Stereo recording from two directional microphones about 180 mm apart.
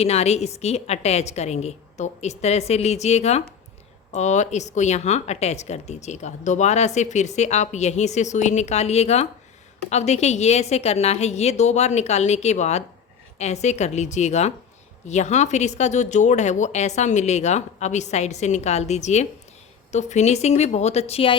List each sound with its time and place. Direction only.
0.0 s speech: 35° left (ahead or behind)